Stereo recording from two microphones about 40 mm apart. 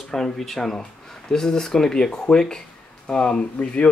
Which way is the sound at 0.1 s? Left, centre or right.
Centre.